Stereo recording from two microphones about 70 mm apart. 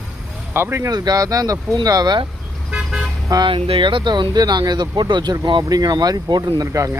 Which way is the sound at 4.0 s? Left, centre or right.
Right.